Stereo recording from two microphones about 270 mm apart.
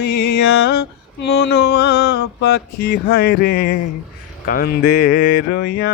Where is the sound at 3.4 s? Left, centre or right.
Left.